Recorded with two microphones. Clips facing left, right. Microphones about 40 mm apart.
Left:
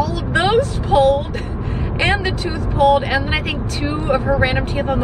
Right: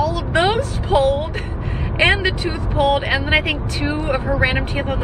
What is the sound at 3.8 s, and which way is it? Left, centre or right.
Speech, right.